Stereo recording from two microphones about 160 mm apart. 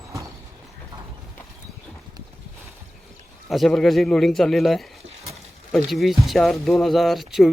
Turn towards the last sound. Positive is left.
turn(degrees=0)  # may be behind; listen again after turning